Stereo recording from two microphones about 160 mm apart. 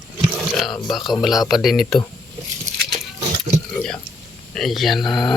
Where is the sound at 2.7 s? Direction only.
20° right (ahead or behind).